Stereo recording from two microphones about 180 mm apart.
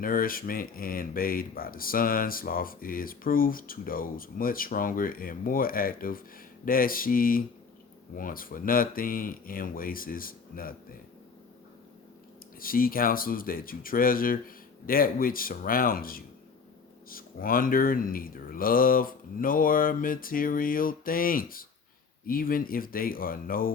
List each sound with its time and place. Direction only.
0.0 s speech: 50° left (ahead or behind)
12.5 s speech: 50° left (ahead or behind)